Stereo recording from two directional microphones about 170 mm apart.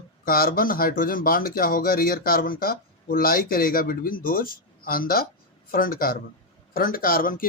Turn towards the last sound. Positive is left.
turn(degrees=55)  # may be behind; listen again after turning